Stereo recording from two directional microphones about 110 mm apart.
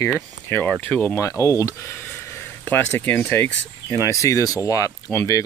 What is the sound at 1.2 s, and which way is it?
Speech, 30° left (ahead or behind).